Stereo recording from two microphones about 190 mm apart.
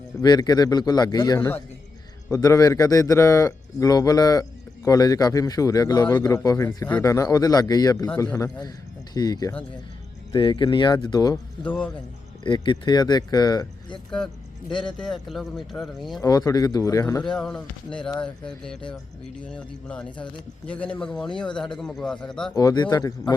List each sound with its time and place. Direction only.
0.2 s a man's voice: 20° left (ahead or behind)
11.6 s a man's voice: 10° left (ahead or behind)
12.4 s a man's voice: 25° left (ahead or behind)
15.1 s speech: centre (ahead or behind)
16.2 s a man's voice: 20° left (ahead or behind)
17.3 s a man's voice: 5° left (ahead or behind)
22.5 s a man's voice: 20° left (ahead or behind)